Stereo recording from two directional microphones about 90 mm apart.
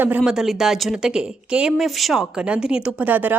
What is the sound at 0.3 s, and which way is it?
A woman's voice, 5° right (ahead or behind).